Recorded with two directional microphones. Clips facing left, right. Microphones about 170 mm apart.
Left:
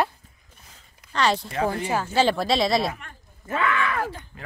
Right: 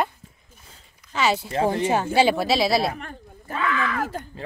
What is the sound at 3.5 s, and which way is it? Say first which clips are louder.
Speech: left 1 dB; 70° left (ahead or behind).